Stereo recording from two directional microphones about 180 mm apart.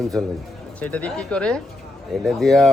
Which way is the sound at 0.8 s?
10° left (ahead or behind).